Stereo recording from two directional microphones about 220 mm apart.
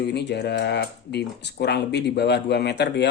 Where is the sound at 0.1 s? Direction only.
50° left (ahead or behind).